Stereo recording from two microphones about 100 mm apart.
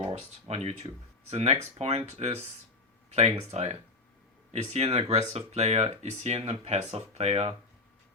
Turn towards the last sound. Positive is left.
turn(degrees=-90)